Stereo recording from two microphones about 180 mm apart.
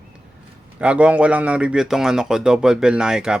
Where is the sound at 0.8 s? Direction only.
5° right (ahead or behind).